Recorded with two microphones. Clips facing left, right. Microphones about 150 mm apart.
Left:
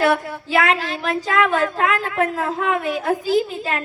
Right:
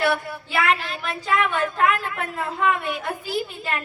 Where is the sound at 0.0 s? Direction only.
90° left.